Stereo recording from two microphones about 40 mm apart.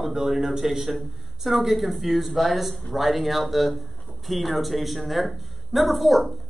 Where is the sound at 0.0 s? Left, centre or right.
Centre.